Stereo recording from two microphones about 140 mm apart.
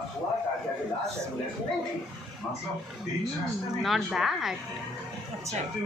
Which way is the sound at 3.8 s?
Centre (ahead or behind).